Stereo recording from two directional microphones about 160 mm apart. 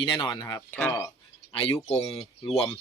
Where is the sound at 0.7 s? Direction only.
10° left (ahead or behind).